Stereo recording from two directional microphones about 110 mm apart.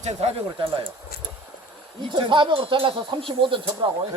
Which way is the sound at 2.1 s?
45° right (ahead or behind).